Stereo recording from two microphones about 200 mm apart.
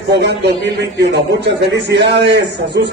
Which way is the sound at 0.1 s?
55° right (ahead or behind).